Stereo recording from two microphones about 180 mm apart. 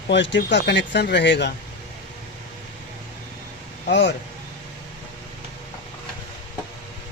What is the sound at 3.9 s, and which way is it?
Speech, 70° left (ahead or behind).